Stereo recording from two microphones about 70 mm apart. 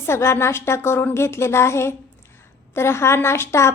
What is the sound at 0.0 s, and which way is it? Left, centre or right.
A woman's voice, left.